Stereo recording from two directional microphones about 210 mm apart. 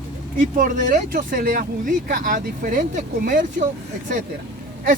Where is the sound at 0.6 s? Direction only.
40° right (ahead or behind).